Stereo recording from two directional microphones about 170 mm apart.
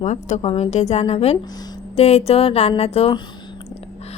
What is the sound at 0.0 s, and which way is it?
A woman's voice, 45° left (ahead or behind).